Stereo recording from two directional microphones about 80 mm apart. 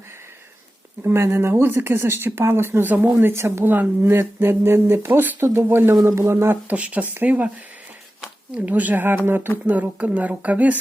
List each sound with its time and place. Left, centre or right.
1.0 s speech: right
5.9 s speech: right
6.7 s speech: centre